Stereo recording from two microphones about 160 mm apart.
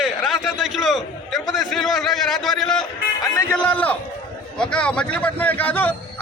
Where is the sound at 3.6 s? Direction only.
10° left (ahead or behind).